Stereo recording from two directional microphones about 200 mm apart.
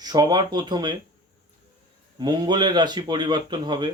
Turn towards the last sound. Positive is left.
turn(degrees=-20)  # may be behind; listen again after turning